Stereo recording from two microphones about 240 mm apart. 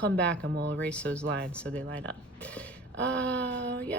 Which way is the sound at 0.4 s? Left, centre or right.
Right.